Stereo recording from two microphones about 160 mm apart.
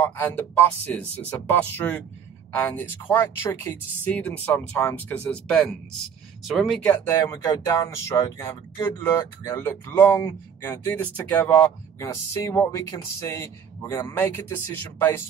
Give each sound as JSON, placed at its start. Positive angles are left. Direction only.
{"t": 0.0, "sound": "speech", "side_deg": 15}
{"t": 6.9, "sound": "speech", "side_deg": 15}